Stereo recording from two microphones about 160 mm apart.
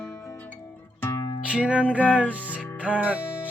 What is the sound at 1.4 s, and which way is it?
Music, 5° right (ahead or behind).